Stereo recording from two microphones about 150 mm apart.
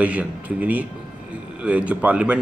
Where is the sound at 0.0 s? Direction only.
10° right (ahead or behind).